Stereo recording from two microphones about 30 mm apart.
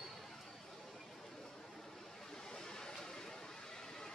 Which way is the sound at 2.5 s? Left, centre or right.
Left.